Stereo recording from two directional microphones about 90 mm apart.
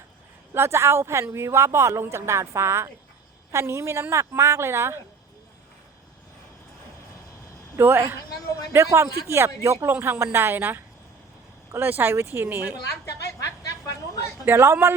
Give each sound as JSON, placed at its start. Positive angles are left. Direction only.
{"t": 0.5, "sound": "a man's voice", "side_deg": -30}
{"t": 7.8, "sound": "a man's voice", "side_deg": -25}
{"t": 14.4, "sound": "speech", "side_deg": -30}